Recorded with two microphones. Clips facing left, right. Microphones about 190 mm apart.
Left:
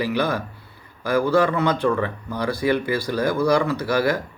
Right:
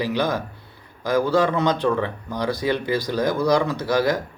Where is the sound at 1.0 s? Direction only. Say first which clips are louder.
Even; 15° right (ahead or behind).